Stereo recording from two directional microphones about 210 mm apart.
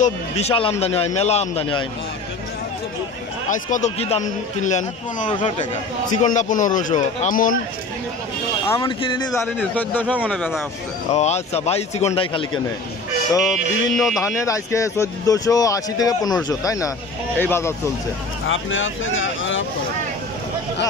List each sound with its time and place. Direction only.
0.0 s a man's voice: 30° left (ahead or behind)
3.4 s a man's voice: 35° left (ahead or behind)
8.6 s a man's voice: 20° left (ahead or behind)
9.6 s speech: 5° left (ahead or behind)
10.1 s music: centre (ahead or behind)
11.1 s a man's voice: 30° left (ahead or behind)
13.4 s music: centre (ahead or behind)
14.1 s speech: 15° left (ahead or behind)
18.5 s speech: 65° left (ahead or behind)